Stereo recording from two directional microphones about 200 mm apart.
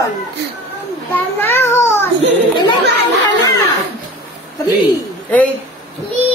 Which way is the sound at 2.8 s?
60° right (ahead or behind).